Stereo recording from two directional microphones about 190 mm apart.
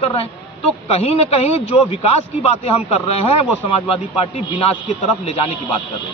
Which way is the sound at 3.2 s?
30° left (ahead or behind).